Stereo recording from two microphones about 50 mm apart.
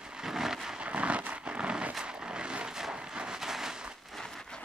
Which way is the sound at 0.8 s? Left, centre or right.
Right.